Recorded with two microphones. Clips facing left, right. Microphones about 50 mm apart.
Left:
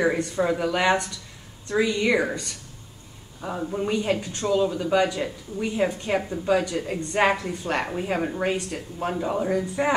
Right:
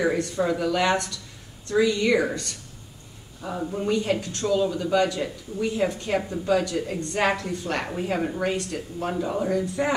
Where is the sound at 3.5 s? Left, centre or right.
Centre.